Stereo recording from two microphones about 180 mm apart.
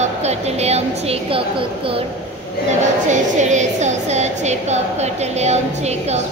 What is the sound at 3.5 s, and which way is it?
A woman's voice, 40° right (ahead or behind).